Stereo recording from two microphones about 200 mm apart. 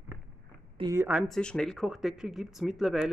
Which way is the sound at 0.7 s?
20° right (ahead or behind).